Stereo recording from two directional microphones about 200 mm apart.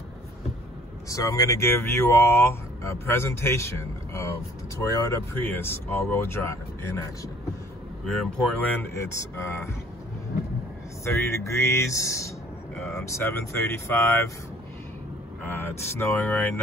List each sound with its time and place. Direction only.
1.0 s speech: 15° left (ahead or behind)
8.0 s speech: centre (ahead or behind)
11.1 s speech: 15° left (ahead or behind)
15.4 s speech: 10° left (ahead or behind)